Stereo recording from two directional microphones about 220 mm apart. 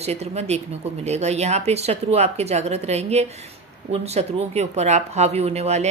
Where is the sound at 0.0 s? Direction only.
30° right (ahead or behind).